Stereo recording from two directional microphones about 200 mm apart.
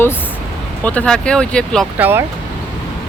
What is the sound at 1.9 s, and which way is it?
Speech, 10° right (ahead or behind).